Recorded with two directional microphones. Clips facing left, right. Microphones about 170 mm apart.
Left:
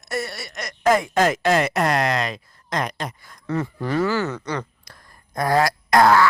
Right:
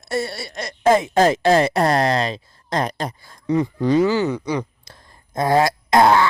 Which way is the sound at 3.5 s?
15° right (ahead or behind).